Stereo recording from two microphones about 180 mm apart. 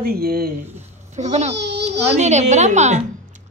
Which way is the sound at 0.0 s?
55° right (ahead or behind).